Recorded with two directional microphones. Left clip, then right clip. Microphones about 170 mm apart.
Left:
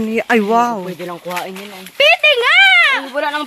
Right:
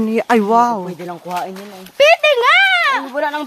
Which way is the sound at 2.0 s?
45° right (ahead or behind).